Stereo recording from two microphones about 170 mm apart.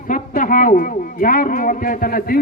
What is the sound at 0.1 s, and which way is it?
Speech, 50° left (ahead or behind).